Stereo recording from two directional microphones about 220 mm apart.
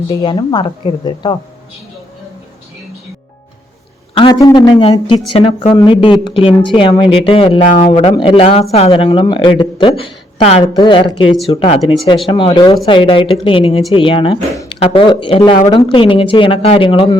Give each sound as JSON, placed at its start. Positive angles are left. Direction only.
{"t": 0.1, "sound": "speech", "side_deg": 20}
{"t": 4.1, "sound": "speech", "side_deg": 20}